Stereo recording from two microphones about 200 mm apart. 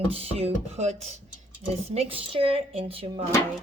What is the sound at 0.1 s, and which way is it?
Speech, 30° right (ahead or behind).